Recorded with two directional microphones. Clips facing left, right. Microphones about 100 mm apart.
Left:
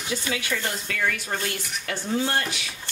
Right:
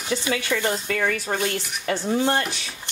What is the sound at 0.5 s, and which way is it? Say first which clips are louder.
Speech: right 5 dB; 20° right (ahead or behind).